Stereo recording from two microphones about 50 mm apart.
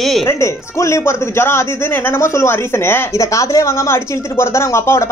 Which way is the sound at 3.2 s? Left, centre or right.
Left.